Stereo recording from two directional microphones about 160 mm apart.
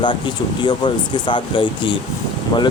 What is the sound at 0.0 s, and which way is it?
Speech, 30° left (ahead or behind).